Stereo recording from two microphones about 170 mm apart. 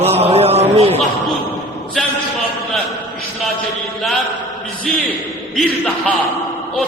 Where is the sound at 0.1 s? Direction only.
35° right (ahead or behind).